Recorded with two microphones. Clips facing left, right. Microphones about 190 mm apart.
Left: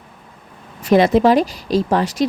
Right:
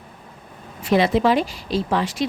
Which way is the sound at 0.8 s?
45° left (ahead or behind).